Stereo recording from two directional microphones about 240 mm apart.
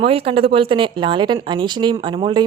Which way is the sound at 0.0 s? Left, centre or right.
Right.